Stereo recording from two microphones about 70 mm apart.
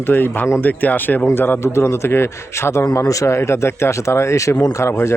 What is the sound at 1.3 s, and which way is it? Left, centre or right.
A man's voice, left.